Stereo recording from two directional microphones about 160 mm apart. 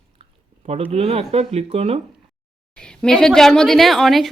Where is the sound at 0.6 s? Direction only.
40° right (ahead or behind).